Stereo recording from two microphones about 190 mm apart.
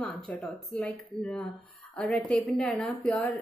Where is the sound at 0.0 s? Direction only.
5° left (ahead or behind).